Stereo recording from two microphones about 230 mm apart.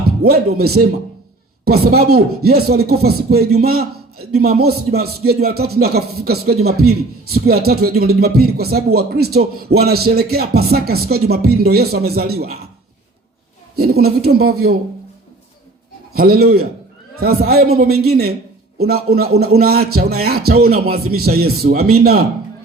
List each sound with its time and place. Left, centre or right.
0.2 s a man's voice: right
13.7 s a man's voice: right
16.1 s a man's voice: right
20.6 s speech: right
21.2 s a man's voice: right